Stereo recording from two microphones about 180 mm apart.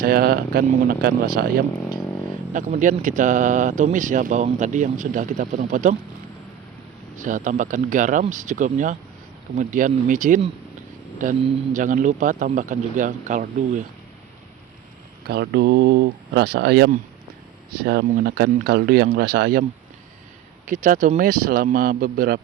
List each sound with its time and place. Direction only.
0.0 s speech: 55° right (ahead or behind)
2.5 s speech: 45° right (ahead or behind)
7.2 s speech: 45° right (ahead or behind)
15.3 s speech: 65° right (ahead or behind)
20.7 s speech: 45° right (ahead or behind)